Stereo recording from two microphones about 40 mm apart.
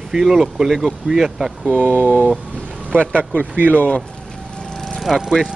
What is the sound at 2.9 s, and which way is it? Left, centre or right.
Speech, left.